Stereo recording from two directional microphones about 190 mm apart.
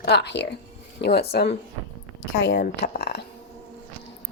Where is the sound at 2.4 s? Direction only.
70° left (ahead or behind).